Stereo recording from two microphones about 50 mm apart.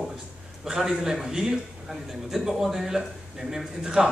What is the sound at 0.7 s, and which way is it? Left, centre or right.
Speech, centre.